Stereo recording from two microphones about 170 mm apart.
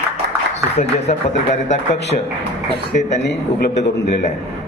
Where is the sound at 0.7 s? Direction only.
40° left (ahead or behind).